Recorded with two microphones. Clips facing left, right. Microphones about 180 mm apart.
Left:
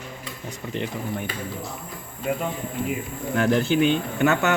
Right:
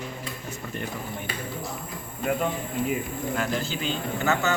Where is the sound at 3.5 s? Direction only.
60° left (ahead or behind).